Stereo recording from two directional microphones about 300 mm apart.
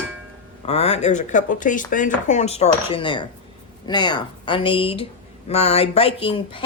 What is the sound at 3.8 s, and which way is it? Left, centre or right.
Speech, centre.